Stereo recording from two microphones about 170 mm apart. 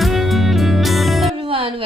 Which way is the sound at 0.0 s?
Centre (ahead or behind).